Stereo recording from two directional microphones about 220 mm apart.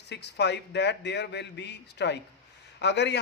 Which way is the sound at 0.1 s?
50° left (ahead or behind).